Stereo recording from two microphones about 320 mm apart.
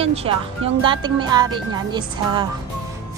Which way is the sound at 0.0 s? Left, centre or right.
Centre.